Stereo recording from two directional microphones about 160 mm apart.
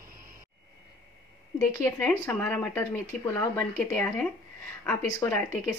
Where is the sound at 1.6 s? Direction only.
15° left (ahead or behind).